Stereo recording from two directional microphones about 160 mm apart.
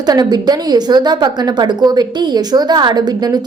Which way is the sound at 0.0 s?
25° right (ahead or behind).